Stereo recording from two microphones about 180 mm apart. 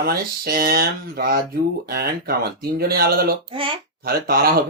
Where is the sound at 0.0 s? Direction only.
60° right (ahead or behind).